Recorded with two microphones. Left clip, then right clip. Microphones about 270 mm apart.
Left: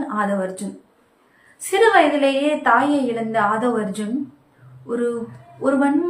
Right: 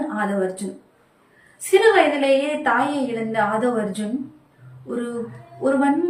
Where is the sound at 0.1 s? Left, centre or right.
Centre.